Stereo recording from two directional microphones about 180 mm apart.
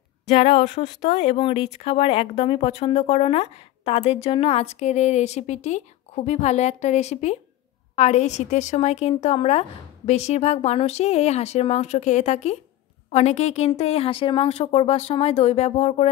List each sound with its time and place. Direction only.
0.3 s speech: 35° left (ahead or behind)